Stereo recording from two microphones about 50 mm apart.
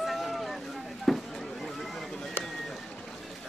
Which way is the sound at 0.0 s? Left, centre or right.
Centre.